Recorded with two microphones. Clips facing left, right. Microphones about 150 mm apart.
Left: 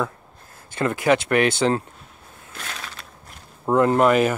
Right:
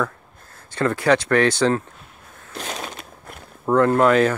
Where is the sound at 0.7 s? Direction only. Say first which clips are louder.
Right 1 dB; 20° left (ahead or behind).